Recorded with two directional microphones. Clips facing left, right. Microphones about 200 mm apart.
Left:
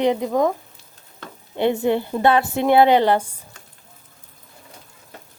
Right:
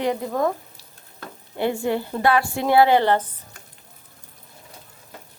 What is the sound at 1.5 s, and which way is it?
Speech, 20° left (ahead or behind).